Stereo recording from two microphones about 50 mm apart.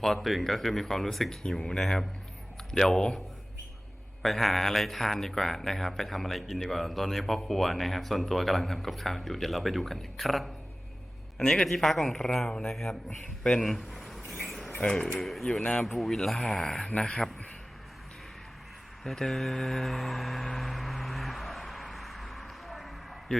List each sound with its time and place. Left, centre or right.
0.0 s speech: centre
4.2 s speech: centre
11.3 s speech: centre
14.4 s a sound: centre
14.8 s speech: centre
19.0 s music: centre